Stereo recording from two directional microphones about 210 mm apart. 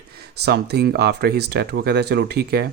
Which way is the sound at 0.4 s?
50° right (ahead or behind).